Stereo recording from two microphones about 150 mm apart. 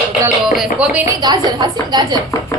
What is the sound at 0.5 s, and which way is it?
Speech, 10° right (ahead or behind).